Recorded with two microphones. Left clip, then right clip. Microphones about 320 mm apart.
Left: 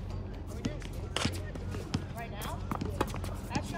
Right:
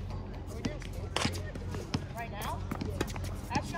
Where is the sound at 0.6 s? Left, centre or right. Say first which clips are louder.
Right 1 dB; right.